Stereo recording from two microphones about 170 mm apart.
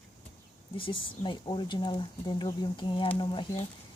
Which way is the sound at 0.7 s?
30° left (ahead or behind).